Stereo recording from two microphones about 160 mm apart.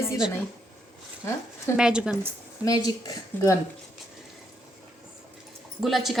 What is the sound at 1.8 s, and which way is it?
Speech, 5° right (ahead or behind).